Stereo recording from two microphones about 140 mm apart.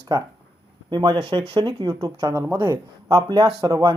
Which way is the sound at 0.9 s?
30° right (ahead or behind).